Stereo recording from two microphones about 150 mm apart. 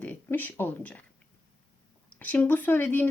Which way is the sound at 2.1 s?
10° left (ahead or behind).